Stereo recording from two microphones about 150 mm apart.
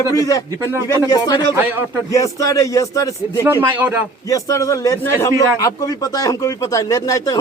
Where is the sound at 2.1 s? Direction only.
20° left (ahead or behind).